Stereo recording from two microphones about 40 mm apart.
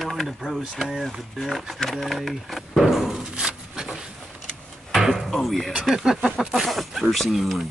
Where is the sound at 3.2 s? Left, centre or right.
Centre.